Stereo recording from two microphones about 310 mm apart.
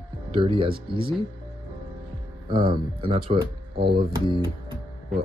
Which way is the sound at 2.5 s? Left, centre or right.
Centre.